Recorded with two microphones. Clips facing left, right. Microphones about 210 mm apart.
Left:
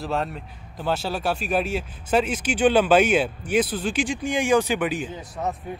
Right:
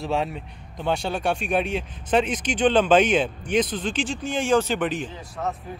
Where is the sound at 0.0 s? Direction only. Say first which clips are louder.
Right 1 dB; centre (ahead or behind).